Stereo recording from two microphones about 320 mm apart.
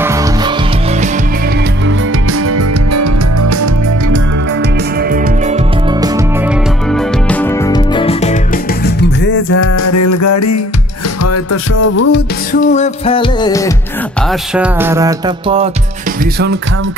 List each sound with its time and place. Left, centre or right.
2.5 s music: right
7.2 s music: centre
9.8 s music: left
11.8 s music: left
12.7 s music: centre
14.5 s music: centre